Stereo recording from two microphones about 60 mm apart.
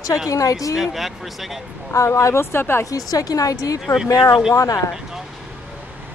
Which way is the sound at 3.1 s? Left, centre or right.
Left.